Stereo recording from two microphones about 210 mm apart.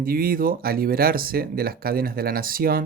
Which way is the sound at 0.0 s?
45° right (ahead or behind).